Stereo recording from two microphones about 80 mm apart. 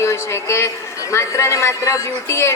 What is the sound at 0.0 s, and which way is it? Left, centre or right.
A man's voice, left.